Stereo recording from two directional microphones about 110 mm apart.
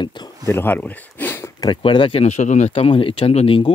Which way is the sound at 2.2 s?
90° left.